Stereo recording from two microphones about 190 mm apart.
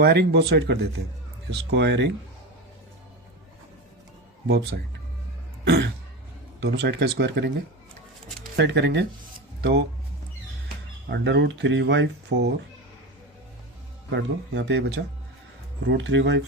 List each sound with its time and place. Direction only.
0.0 s speech: 60° right (ahead or behind)
4.4 s speech: 60° right (ahead or behind)
8.5 s speech: 65° right (ahead or behind)
11.1 s speech: 65° right (ahead or behind)
14.1 s speech: 65° right (ahead or behind)
15.9 s speech: 75° right (ahead or behind)